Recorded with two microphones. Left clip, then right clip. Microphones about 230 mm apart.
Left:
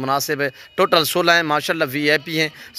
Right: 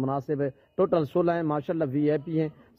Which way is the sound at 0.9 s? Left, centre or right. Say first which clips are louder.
Left 12 dB; left.